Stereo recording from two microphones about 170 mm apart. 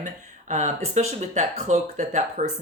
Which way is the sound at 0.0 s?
45° right (ahead or behind).